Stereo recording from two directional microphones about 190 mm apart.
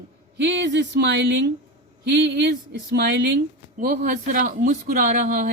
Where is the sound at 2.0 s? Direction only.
65° right (ahead or behind).